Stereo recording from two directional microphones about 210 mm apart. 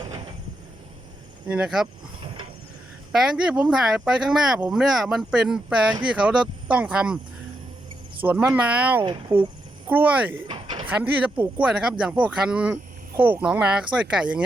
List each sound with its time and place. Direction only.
1.5 s speech: 5° right (ahead or behind)
3.1 s speech: 5° right (ahead or behind)
8.2 s speech: 10° right (ahead or behind)
10.5 s a sound: 25° right (ahead or behind)
10.8 s speech: 5° right (ahead or behind)